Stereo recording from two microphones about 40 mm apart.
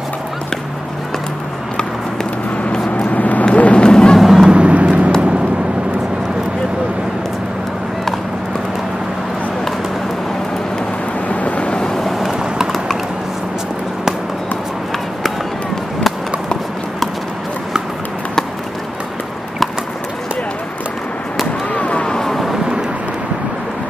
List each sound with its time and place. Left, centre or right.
2.7 s vehicle: left
3.2 s vehicle: left
3.5 s run: left
3.8 s music: left
4.2 s vehicle: centre
4.5 s vehicle: right
11.2 s vehicle: left
11.8 s vehicle: centre
12.1 s vehicle: centre
21.7 s a sound: left
22.0 s vehicle: centre